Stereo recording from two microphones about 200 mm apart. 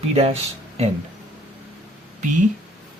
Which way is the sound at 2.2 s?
40° right (ahead or behind).